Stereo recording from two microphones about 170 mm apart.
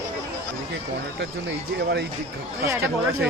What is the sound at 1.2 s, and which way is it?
Speech, 90° right.